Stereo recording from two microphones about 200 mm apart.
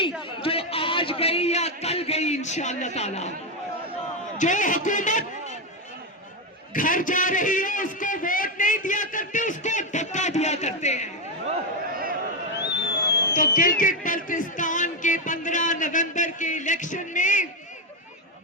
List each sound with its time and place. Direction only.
0.2 s a man's voice: 30° left (ahead or behind)
4.4 s a man's voice: 40° left (ahead or behind)
6.7 s a man's voice: 40° left (ahead or behind)
12.5 s a sound: 60° left (ahead or behind)
13.3 s music: 40° left (ahead or behind)